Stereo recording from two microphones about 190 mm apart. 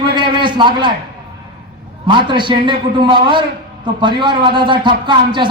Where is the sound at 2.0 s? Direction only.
25° right (ahead or behind).